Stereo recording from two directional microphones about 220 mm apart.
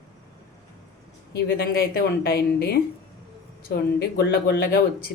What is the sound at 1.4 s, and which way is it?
Speech, 45° left (ahead or behind).